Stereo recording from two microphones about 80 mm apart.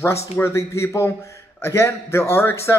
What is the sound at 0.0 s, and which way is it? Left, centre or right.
A man's voice, left.